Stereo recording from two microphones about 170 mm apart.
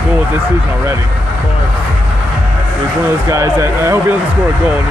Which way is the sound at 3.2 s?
20° right (ahead or behind).